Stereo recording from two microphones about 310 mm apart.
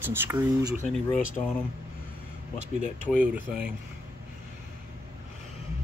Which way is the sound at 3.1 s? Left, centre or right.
Centre.